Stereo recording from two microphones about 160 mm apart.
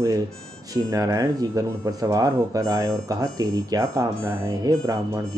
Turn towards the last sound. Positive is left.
turn(degrees=-20)  # may be behind; listen again after turning